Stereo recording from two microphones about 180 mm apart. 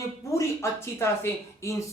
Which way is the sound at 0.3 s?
15° left (ahead or behind).